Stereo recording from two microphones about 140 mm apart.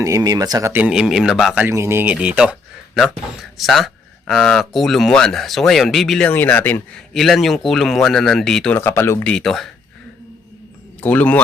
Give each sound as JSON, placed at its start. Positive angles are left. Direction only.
{"t": 0.0, "sound": "speech", "side_deg": -25}
{"t": 0.7, "sound": "speech", "side_deg": -10}
{"t": 1.6, "sound": "speech", "side_deg": -20}
{"t": 7.1, "sound": "speech", "side_deg": 0}
{"t": 8.7, "sound": "speech", "side_deg": 20}
{"t": 9.2, "sound": "speech", "side_deg": 5}
{"t": 11.0, "sound": "speech", "side_deg": 10}